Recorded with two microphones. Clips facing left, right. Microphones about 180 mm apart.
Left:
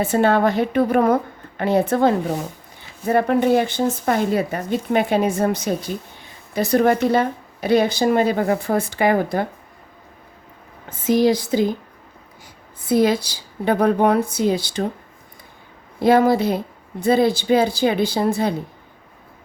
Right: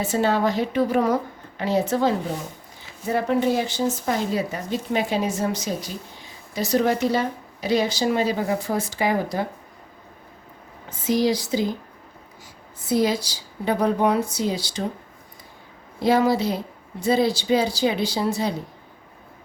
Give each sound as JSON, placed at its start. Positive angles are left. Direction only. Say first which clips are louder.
{"t": 0.0, "sound": "speech", "louder": "left 4 dB", "side_deg": 55}
{"t": 10.8, "sound": "speech", "louder": "left 4 dB", "side_deg": 55}
{"t": 12.8, "sound": "speech", "louder": "left 4 dB", "side_deg": 55}
{"t": 16.0, "sound": "speech", "louder": "left 4 dB", "side_deg": 55}